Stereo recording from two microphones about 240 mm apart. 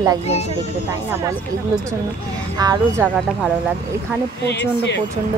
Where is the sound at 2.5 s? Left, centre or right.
Centre.